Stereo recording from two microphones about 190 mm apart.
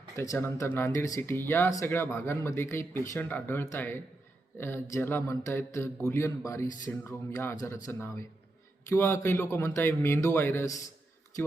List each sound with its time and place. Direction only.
0.2 s speech: 10° left (ahead or behind)